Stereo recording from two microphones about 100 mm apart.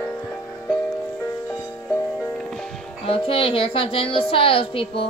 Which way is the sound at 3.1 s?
60° left (ahead or behind).